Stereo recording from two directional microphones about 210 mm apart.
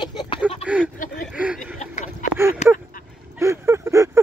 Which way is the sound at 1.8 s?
35° left (ahead or behind).